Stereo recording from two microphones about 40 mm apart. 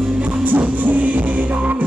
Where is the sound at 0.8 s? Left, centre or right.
Right.